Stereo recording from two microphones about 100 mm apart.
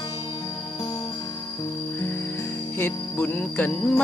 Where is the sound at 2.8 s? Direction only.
20° left (ahead or behind).